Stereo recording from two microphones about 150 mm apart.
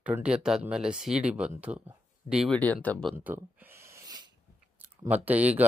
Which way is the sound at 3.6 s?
15° right (ahead or behind).